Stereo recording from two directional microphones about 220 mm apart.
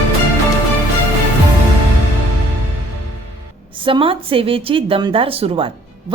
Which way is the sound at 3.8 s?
25° right (ahead or behind).